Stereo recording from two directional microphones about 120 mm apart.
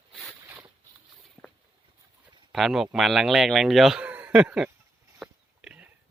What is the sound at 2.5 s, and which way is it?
Speech, centre (ahead or behind).